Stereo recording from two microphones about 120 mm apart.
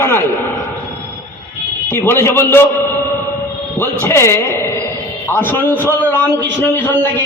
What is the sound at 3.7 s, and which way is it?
A man's voice, 20° left (ahead or behind).